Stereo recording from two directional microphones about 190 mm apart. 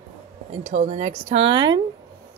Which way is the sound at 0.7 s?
40° right (ahead or behind).